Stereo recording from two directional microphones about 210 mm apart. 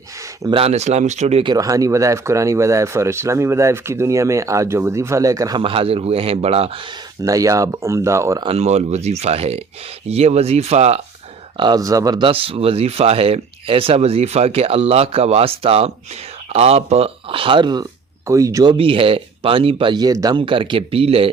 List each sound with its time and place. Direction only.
0.4 s speech: 25° right (ahead or behind)
1.5 s speech: 15° right (ahead or behind)
7.2 s speech: 15° right (ahead or behind)
8.4 s speech: 30° right (ahead or behind)
11.5 s speech: 20° right (ahead or behind)